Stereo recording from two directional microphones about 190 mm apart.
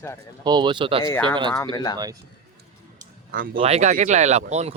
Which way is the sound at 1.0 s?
10° left (ahead or behind).